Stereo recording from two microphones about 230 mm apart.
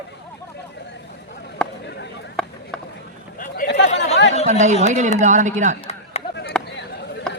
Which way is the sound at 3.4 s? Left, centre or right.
Left.